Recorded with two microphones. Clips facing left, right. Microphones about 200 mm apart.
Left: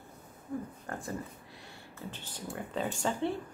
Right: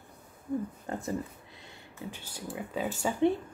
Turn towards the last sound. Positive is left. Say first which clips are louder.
# right 5 dB
turn(degrees=-15)  # may be behind; listen again after turning